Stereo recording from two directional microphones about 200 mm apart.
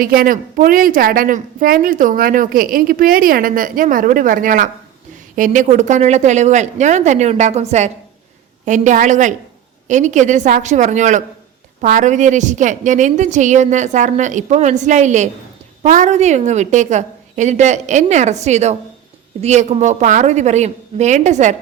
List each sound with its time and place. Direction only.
0.0 s a woman's voice: 45° right (ahead or behind)